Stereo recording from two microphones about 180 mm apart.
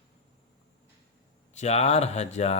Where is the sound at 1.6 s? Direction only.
35° left (ahead or behind).